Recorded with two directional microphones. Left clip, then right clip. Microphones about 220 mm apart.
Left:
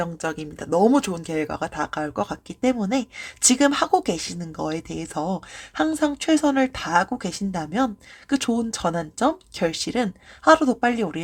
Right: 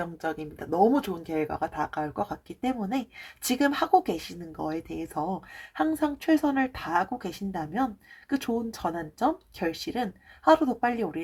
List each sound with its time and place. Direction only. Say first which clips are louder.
0.0 s speech: left 5 dB; 35° left (ahead or behind)